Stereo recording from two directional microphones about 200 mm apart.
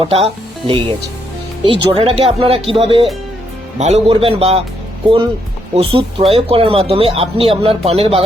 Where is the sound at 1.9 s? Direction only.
30° right (ahead or behind).